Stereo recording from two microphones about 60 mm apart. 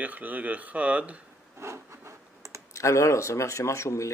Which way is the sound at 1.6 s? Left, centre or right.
Right.